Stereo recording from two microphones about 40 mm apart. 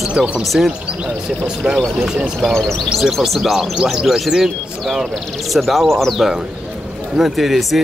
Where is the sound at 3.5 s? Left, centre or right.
Centre.